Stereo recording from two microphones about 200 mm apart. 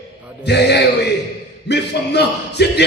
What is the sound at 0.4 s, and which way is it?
A man's voice, 55° left (ahead or behind).